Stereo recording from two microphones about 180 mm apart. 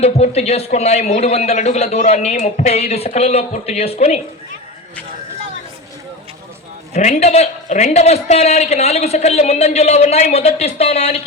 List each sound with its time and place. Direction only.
0.0 s a man's voice: 35° left (ahead or behind)
6.9 s a man's voice: 40° left (ahead or behind)